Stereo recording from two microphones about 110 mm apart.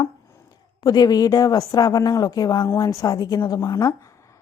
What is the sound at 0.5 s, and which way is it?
Speech, 40° left (ahead or behind).